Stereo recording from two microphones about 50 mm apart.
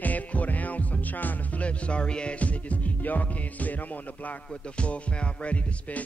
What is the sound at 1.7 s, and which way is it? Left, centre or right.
Music, left.